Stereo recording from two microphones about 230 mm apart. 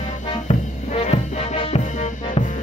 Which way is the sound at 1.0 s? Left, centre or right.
Left.